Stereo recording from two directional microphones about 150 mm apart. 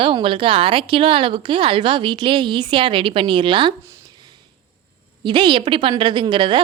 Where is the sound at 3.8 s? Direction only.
30° right (ahead or behind).